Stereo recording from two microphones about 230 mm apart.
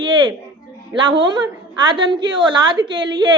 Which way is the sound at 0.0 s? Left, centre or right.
Centre.